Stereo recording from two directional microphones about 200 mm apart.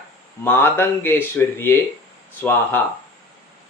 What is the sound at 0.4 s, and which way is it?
Speech, 10° left (ahead or behind).